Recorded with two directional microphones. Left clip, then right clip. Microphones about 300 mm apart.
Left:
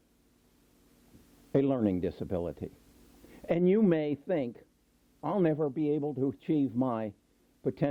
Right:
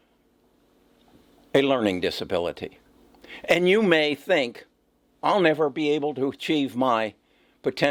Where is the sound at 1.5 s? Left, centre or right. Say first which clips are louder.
Right 8 dB; centre.